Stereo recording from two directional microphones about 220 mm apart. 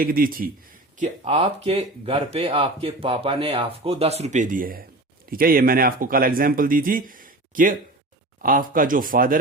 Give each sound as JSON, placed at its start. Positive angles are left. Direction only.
{"t": 0.0, "sound": "speech", "side_deg": -40}
{"t": 0.9, "sound": "speech", "side_deg": -30}